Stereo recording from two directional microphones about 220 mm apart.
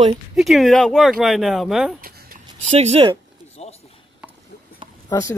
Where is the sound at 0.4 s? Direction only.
Centre (ahead or behind).